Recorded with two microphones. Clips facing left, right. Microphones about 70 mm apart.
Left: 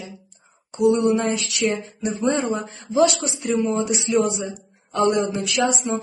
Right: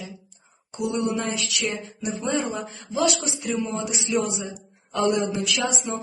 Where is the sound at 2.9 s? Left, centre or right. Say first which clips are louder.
Left 5 dB; left.